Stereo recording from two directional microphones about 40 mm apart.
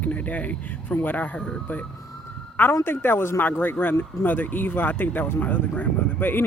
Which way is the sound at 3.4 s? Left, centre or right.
Left.